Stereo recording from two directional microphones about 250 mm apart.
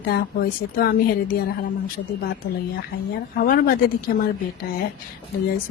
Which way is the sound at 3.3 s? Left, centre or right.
Left.